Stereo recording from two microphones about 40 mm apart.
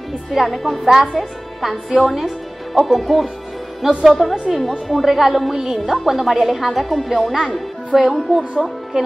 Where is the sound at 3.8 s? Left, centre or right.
Centre.